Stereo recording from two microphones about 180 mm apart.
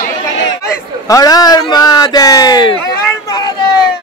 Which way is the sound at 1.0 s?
20° left (ahead or behind).